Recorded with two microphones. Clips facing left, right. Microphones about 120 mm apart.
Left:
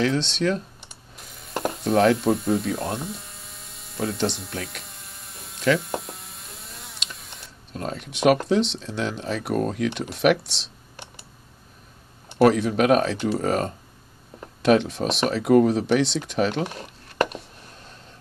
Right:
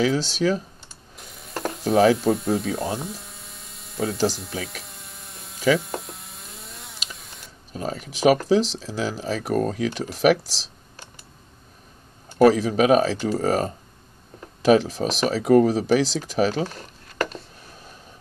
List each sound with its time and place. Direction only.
0.0 s speech: 5° right (ahead or behind)
1.1 s ratchet: centre (ahead or behind)
12.4 s speech: centre (ahead or behind)
16.6 s a sound: 20° left (ahead or behind)